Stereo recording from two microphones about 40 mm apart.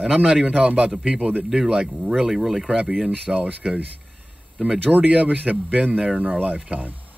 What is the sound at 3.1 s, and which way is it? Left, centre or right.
Speech, right.